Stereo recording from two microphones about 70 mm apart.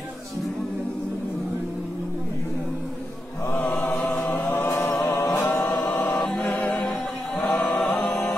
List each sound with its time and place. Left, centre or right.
3.8 s chant: left
4.7 s a capella: left
5.4 s choir: left
6.4 s a capella: left
7.5 s choir: centre
8.1 s music: centre